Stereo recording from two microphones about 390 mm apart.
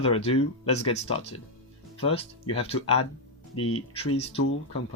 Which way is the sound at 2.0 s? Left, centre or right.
Centre.